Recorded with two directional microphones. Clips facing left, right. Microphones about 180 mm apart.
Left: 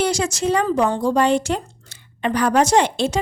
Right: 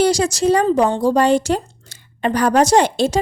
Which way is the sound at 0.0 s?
35° right (ahead or behind).